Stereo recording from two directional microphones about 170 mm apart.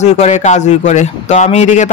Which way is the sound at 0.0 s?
45° left (ahead or behind).